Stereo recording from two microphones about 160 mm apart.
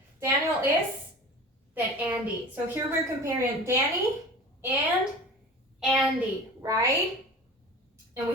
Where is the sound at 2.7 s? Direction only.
15° right (ahead or behind).